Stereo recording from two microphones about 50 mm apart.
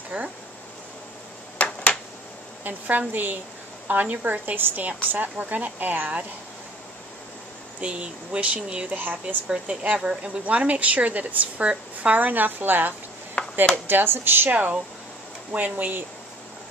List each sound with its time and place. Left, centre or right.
0.1 s speech: right
1.6 s a sound: left
2.6 s a woman's voice: right
7.8 s speech: right
8.9 s a woman's voice: right
9.5 s a woman's voice: right
13.4 s chop: left
13.8 s speech: right
14.5 s a woman's voice: right